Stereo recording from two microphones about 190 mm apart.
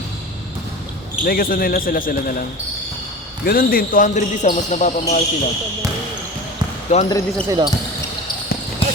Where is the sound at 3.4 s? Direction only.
50° left (ahead or behind).